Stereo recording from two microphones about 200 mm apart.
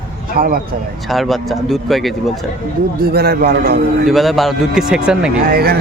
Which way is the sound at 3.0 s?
50° right (ahead or behind).